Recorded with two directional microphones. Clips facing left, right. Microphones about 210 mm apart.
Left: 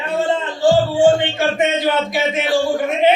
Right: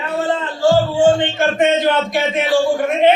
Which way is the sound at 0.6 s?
15° left (ahead or behind).